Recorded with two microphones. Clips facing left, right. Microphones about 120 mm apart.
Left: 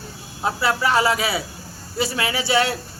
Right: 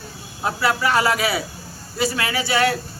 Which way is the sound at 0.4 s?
25° left (ahead or behind).